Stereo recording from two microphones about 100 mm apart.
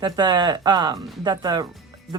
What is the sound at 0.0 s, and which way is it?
Speech, 45° right (ahead or behind).